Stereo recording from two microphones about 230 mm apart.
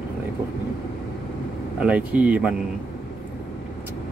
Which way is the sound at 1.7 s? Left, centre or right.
Centre.